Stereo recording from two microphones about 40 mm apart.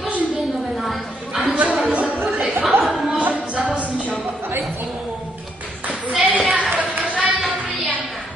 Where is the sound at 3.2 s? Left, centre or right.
Right.